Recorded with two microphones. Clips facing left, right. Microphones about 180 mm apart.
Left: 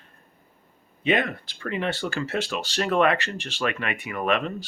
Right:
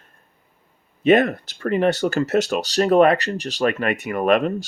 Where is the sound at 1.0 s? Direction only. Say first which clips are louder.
Right 8 dB; 45° right (ahead or behind).